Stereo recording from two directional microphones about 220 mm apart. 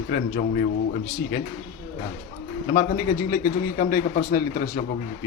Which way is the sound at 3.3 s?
40° left (ahead or behind).